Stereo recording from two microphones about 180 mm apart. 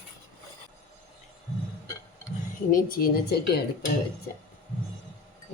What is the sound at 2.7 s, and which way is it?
Speech, 50° left (ahead or behind).